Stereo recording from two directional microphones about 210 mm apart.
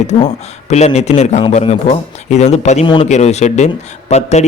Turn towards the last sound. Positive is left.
turn(degrees=30)  # may be behind; listen again after turning